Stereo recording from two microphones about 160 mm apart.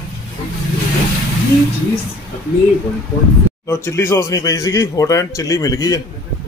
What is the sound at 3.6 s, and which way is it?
Speech, 15° left (ahead or behind).